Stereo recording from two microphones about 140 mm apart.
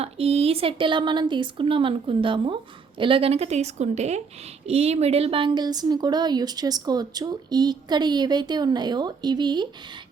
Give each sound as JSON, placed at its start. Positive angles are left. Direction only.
{"t": 0.0, "sound": "a woman's voice", "side_deg": -45}